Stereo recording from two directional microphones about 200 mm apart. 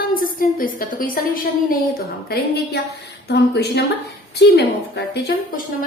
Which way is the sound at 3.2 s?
55° left (ahead or behind).